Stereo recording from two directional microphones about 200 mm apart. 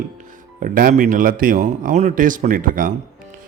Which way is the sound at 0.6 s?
45° right (ahead or behind).